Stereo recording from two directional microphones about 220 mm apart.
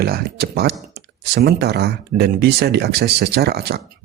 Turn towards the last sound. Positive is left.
turn(degrees=-45)  # may be behind; listen again after turning